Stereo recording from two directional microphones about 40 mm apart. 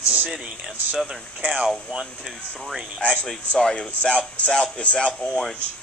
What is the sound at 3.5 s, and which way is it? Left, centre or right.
Speech, centre.